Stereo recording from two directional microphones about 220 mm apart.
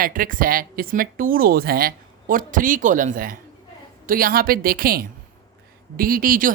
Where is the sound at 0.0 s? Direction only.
40° right (ahead or behind).